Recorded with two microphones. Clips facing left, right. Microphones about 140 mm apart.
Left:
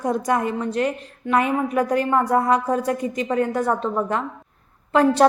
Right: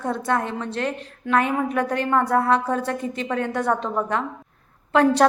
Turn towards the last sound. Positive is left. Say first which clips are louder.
# left 1 dB
turn(degrees=5)  # may be behind; listen again after turning